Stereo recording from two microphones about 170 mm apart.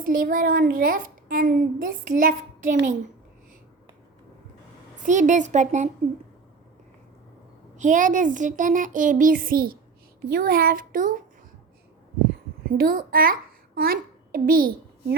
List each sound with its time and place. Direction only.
0.0 s a woman's voice: 55° right (ahead or behind)
5.0 s speech: 45° right (ahead or behind)
7.8 s a woman's voice: 50° right (ahead or behind)
12.6 s a child's voice: 60° right (ahead or behind)